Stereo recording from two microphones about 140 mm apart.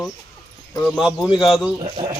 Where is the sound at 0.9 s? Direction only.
Centre (ahead or behind).